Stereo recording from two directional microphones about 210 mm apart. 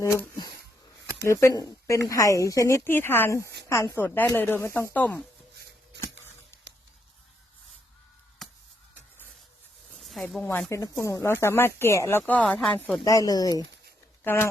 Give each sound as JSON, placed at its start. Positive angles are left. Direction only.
{"t": 1.3, "sound": "a woman's voice", "side_deg": 15}
{"t": 10.0, "sound": "a woman's voice", "side_deg": 0}
{"t": 13.1, "sound": "a woman's voice", "side_deg": 15}